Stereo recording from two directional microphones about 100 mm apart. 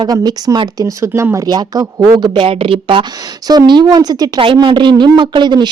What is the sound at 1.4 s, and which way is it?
Speech, 40° right (ahead or behind).